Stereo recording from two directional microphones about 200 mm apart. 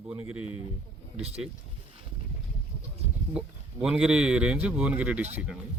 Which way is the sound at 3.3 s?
5° right (ahead or behind).